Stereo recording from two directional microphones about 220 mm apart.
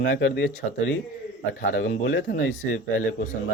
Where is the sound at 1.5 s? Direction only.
55° left (ahead or behind).